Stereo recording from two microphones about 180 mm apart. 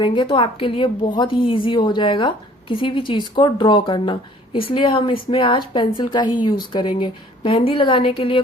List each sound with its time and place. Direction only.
0.0 s a woman's voice: 30° left (ahead or behind)